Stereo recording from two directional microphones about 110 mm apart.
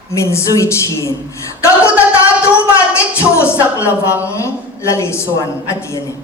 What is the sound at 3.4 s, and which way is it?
A woman's voice, 25° left (ahead or behind).